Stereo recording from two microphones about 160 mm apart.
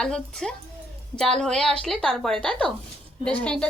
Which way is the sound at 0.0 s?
5° left (ahead or behind).